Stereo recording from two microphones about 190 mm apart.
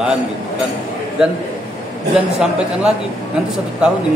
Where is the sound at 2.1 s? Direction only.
5° right (ahead or behind).